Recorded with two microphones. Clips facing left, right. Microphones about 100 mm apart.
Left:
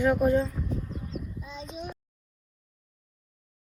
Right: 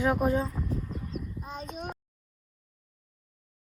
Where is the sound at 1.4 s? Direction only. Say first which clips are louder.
Right 1 dB; 50° right (ahead or behind).